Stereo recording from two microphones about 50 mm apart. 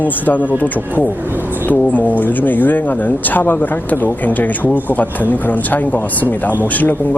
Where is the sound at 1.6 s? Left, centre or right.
Left.